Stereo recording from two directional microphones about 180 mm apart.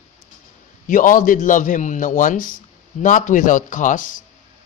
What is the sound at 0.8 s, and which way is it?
A man's voice, 50° left (ahead or behind).